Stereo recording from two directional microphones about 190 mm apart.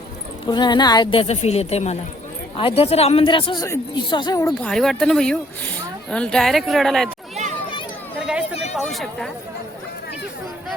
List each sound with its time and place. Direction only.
0.4 s speech: 25° left (ahead or behind)
4.4 s speech: 5° left (ahead or behind)
8.7 s a sound: centre (ahead or behind)